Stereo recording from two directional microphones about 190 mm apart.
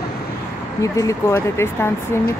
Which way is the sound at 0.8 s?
15° left (ahead or behind).